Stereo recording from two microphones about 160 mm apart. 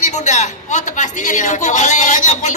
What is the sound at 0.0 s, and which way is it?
A woman's voice, 50° left (ahead or behind).